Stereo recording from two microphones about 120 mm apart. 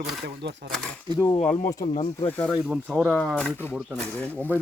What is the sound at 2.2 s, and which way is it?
Speech, 15° left (ahead or behind).